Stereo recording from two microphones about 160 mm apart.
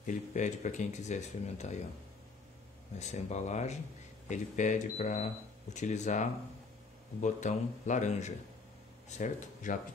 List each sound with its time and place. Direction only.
0.0 s speech: 50° left (ahead or behind)
3.0 s speech: 45° left (ahead or behind)